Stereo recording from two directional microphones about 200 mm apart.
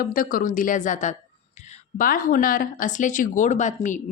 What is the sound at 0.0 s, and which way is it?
A woman's voice, 45° left (ahead or behind).